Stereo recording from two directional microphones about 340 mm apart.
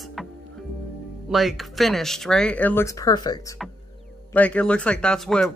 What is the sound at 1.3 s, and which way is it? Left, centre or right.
Speech, centre.